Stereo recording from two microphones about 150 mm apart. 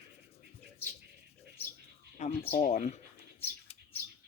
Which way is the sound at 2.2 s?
50° left (ahead or behind).